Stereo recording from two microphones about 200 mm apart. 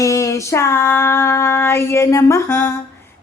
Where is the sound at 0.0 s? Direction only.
15° left (ahead or behind).